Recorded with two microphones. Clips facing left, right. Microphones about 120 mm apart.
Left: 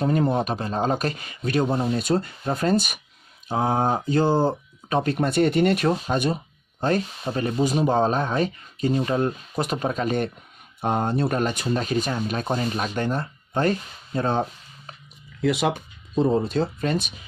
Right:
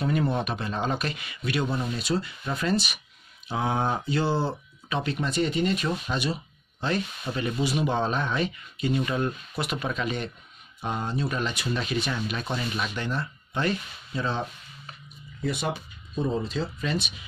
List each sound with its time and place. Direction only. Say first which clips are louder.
0.0 s speech: left 4 dB; 40° left (ahead or behind); by 5.9 s 60° left (ahead or behind)
5.9 s speech: left 5 dB; 45° left (ahead or behind)
15.4 s speech: left 7 dB; 90° left
16.2 s speech: left 7 dB; 60° left (ahead or behind)